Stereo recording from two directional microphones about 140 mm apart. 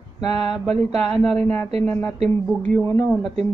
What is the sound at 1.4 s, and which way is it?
A woman's voice, 20° left (ahead or behind).